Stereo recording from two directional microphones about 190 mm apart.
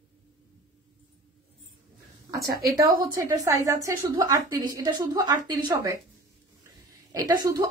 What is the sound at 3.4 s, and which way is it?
A woman's voice, 15° right (ahead or behind).